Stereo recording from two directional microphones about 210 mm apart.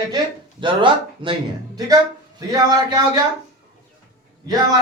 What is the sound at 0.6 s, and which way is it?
Speech, 25° right (ahead or behind).